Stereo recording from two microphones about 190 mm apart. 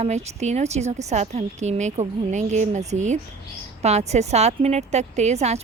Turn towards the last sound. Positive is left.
turn(degrees=-35)  # may be behind; listen again after turning